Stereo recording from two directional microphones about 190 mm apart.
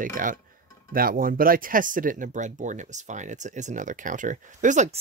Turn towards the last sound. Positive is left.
turn(degrees=-40)  # may be behind; listen again after turning